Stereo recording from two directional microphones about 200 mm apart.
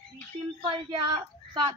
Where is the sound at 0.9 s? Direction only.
20° right (ahead or behind).